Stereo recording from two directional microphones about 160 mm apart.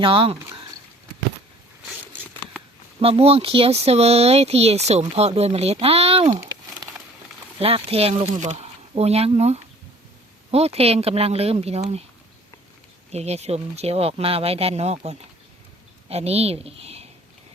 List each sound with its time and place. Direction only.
0.0 s speech: 35° right (ahead or behind)
3.0 s speech: 35° right (ahead or behind)
7.6 s speech: 40° right (ahead or behind)
13.1 s a woman's voice: 40° right (ahead or behind)